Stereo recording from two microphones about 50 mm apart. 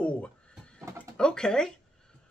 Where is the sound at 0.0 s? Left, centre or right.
Left.